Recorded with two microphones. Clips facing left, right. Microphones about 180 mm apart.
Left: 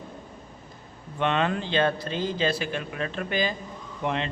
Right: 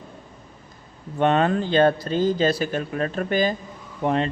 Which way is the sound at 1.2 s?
40° right (ahead or behind).